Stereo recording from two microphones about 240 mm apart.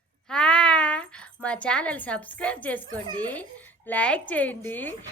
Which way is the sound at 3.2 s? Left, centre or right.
Centre.